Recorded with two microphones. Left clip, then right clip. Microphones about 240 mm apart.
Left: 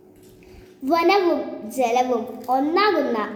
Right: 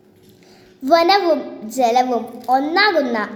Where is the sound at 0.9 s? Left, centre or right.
Right.